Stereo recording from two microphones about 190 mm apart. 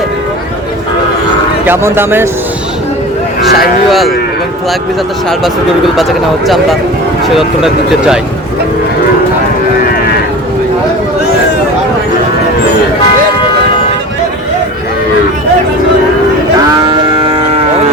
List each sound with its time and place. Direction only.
1.6 s a man's voice: 10° right (ahead or behind)
3.4 s speech: centre (ahead or behind)
6.0 s speech: centre (ahead or behind)
16.8 s music: 25° right (ahead or behind)